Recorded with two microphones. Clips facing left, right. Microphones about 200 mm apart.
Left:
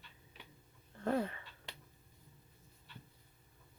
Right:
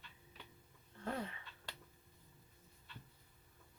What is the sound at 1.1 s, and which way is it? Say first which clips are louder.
Speech: left 8 dB; 50° left (ahead or behind).